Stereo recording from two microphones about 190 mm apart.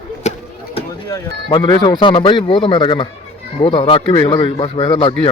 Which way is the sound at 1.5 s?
25° left (ahead or behind).